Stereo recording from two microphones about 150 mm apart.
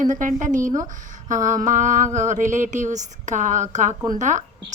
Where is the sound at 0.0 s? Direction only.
60° right (ahead or behind).